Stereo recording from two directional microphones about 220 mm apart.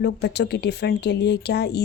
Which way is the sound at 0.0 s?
50° left (ahead or behind).